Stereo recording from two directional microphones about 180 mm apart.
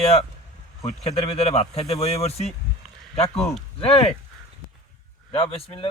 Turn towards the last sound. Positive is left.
turn(degrees=30)  # may be behind; listen again after turning